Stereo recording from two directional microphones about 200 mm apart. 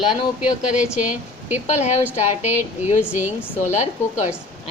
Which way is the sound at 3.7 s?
35° left (ahead or behind).